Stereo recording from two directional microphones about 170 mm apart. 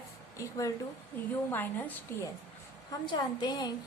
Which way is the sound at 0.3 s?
20° left (ahead or behind).